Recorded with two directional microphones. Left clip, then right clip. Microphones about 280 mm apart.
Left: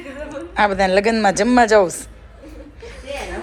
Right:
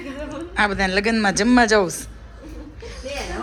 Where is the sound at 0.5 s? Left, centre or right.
Centre.